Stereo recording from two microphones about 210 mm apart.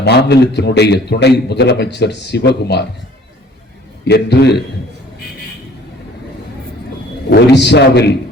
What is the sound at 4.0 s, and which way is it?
Speech, 50° left (ahead or behind).